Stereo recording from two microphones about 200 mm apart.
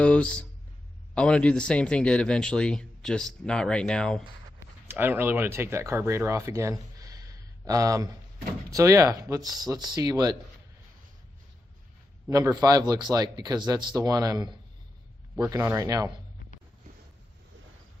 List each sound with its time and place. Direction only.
0.0 s speech: 5° left (ahead or behind)
4.9 s speech: 10° right (ahead or behind)
12.3 s speech: 15° right (ahead or behind)